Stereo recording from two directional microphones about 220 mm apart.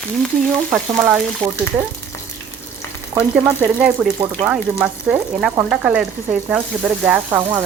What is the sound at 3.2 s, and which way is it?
Speech, 5° right (ahead or behind).